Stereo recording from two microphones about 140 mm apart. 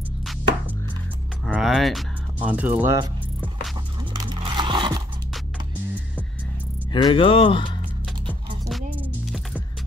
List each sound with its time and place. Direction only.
1.4 s music: centre (ahead or behind)
2.3 s speech: 10° right (ahead or behind)
4.2 s a sound: 35° right (ahead or behind)
6.9 s speech: 35° left (ahead or behind)